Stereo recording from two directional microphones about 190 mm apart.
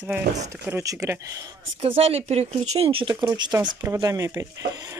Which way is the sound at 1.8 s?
30° right (ahead or behind).